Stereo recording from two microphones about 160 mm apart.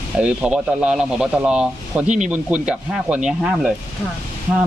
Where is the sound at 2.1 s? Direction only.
50° right (ahead or behind).